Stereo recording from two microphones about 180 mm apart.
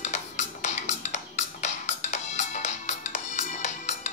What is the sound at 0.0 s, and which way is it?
Music, 40° left (ahead or behind).